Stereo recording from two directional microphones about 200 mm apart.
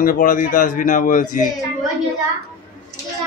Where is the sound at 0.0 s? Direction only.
45° left (ahead or behind).